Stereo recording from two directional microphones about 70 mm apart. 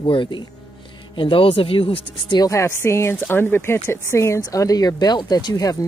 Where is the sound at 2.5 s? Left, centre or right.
Left.